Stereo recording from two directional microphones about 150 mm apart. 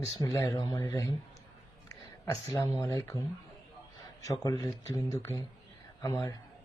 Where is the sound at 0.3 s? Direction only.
25° left (ahead or behind).